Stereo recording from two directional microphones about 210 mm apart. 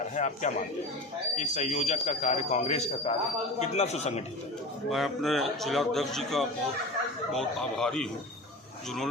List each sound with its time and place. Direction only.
0.2 s a man's voice: 35° left (ahead or behind)
4.9 s a man's voice: centre (ahead or behind)